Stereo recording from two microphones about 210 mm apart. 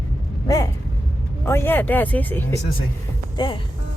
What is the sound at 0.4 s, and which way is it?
Vehicle, 15° left (ahead or behind).